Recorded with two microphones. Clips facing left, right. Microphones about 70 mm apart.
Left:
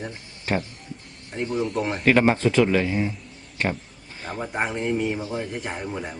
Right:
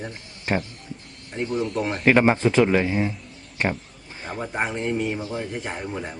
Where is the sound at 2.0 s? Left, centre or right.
Centre.